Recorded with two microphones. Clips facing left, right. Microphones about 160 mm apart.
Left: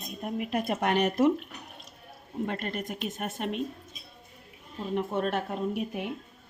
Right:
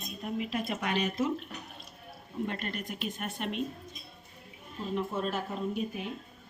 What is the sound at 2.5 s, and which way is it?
Speech, 35° left (ahead or behind).